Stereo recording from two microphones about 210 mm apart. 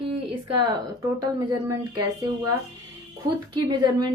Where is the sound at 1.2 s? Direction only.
20° right (ahead or behind).